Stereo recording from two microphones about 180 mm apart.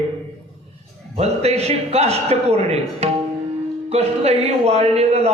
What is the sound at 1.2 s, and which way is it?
A man's voice, 35° right (ahead or behind).